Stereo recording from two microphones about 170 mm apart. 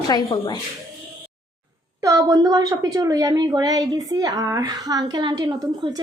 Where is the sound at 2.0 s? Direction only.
20° right (ahead or behind).